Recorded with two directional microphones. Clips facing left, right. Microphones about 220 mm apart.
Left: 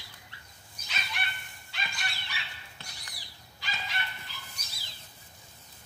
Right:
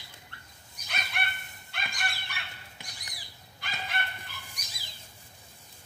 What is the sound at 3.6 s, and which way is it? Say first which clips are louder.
Bow-wow: right 2 dB; 55° right (ahead or behind).